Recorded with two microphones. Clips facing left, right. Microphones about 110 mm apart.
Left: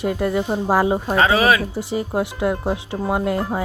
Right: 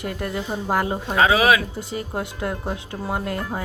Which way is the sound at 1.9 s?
20° left (ahead or behind).